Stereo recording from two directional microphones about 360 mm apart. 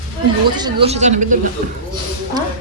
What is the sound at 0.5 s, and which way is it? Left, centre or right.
Speech, centre.